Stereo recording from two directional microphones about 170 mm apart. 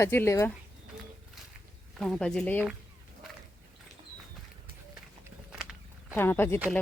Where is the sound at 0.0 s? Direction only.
15° left (ahead or behind).